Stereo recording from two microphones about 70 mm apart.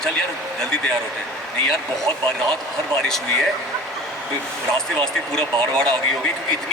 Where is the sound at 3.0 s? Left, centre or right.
Centre.